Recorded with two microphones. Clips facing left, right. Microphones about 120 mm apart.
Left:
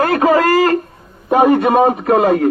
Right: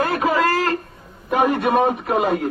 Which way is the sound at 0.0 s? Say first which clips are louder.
Left 6 dB; 65° left (ahead or behind).